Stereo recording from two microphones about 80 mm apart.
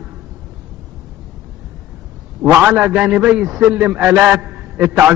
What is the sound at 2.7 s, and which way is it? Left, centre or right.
A man's voice, centre.